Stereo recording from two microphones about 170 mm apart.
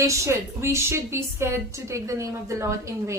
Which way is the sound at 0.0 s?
15° right (ahead or behind).